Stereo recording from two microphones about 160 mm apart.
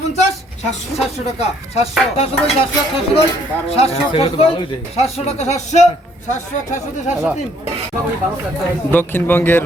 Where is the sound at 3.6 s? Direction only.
40° left (ahead or behind).